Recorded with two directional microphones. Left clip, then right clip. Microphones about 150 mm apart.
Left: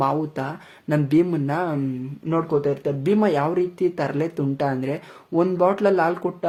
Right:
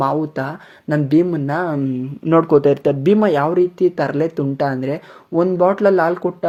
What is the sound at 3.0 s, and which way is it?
Speech, 30° right (ahead or behind).